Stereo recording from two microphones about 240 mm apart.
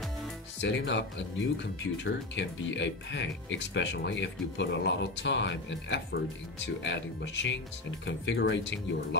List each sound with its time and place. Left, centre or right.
0.6 s speech: left